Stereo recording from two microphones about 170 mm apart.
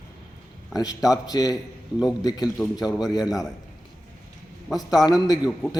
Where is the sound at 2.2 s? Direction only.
25° left (ahead or behind).